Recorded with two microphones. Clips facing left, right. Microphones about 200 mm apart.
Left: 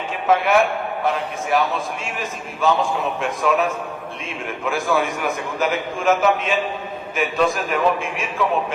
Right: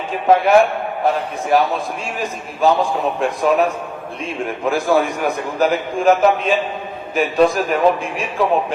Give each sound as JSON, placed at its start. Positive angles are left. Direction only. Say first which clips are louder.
{"t": 0.3, "sound": "a man's voice", "louder": "right 5 dB", "side_deg": -35}